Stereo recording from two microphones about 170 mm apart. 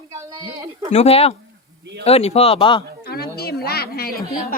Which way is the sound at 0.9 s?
35° left (ahead or behind).